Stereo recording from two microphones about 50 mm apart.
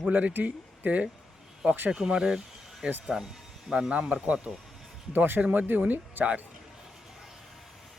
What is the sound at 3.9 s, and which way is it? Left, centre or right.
Speech, right.